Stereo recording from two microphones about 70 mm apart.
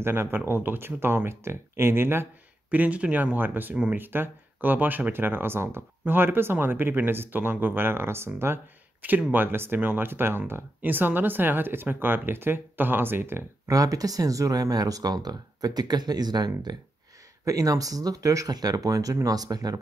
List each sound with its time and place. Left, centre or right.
0.0 s speech: right
2.7 s speech: right
9.3 s speech: right
13.7 s speech: right
17.5 s speech: right
18.5 s speech: right